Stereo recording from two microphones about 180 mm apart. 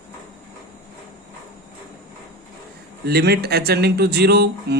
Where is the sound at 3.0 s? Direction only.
60° right (ahead or behind).